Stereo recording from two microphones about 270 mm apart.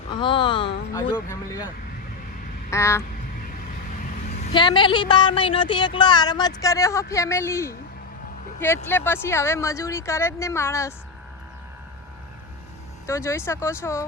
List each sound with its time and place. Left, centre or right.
0.1 s a sound: centre
0.9 s speech: centre
2.6 s quack: centre
4.3 s speech: left
13.1 s speech: centre